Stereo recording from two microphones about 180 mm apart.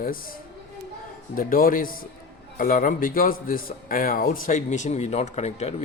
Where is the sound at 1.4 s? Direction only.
50° left (ahead or behind).